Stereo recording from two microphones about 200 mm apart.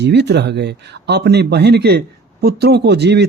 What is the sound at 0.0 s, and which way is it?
A man's voice, 55° right (ahead or behind).